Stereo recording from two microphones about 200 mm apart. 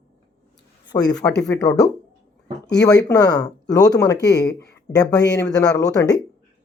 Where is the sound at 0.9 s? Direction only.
20° left (ahead or behind).